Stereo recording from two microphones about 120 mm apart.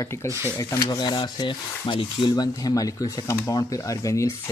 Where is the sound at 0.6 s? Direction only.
30° left (ahead or behind).